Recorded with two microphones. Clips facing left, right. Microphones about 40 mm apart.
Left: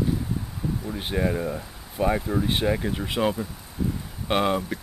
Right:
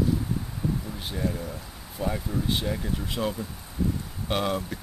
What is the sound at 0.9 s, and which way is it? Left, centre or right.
Speech, left.